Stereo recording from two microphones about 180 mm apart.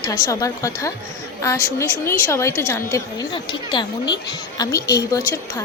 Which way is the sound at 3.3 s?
25° left (ahead or behind).